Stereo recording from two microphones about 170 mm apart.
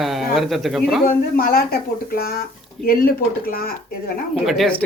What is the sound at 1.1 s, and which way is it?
Speech, 60° left (ahead or behind).